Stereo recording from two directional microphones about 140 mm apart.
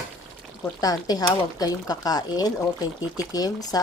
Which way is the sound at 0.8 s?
25° left (ahead or behind).